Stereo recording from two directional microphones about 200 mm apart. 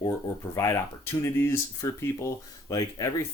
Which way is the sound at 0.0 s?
15° left (ahead or behind).